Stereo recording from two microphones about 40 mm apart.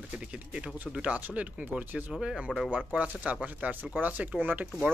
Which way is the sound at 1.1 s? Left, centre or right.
Right.